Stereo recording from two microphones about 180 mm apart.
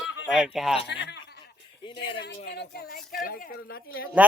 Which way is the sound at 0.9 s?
70° left (ahead or behind).